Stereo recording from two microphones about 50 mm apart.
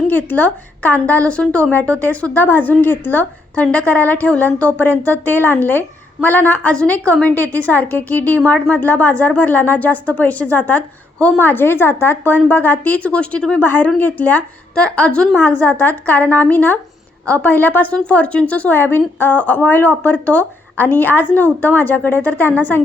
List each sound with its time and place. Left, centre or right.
0.1 s a woman's voice: left
1.3 s a woman's voice: left
13.6 s a woman's voice: left
15.4 s a woman's voice: left
17.9 s speech: left
18.7 s a woman's voice: left
20.1 s a woman's voice: left